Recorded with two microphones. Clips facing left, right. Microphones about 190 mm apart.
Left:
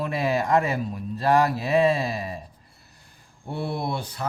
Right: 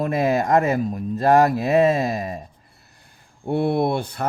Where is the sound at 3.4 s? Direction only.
55° right (ahead or behind).